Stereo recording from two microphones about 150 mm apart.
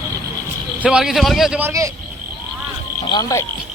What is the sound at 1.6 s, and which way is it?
Speech, 20° right (ahead or behind).